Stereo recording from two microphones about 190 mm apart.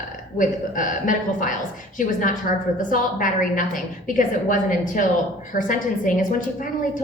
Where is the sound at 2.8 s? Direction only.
45° left (ahead or behind).